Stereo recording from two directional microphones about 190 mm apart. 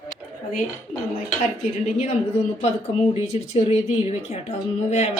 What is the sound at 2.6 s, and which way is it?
Speech, 35° left (ahead or behind).